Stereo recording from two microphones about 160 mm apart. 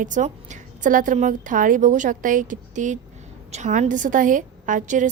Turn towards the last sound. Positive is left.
turn(degrees=-50)  # may be behind; listen again after turning